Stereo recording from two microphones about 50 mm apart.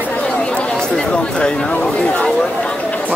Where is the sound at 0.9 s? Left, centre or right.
Left.